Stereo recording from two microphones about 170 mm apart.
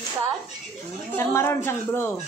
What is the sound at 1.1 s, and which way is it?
Speech, 15° left (ahead or behind).